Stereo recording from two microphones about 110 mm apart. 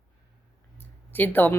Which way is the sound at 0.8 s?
15° left (ahead or behind).